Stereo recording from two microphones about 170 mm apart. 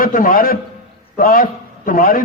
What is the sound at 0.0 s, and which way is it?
A man's voice, 55° left (ahead or behind).